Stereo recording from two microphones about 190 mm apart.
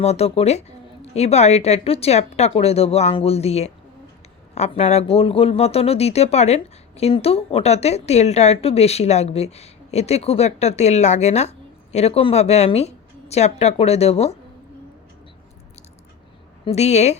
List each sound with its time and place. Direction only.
0.0 s speech: 35° left (ahead or behind)
16.6 s speech: 35° left (ahead or behind)